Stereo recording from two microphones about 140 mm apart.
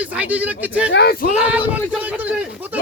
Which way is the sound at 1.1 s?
90° left.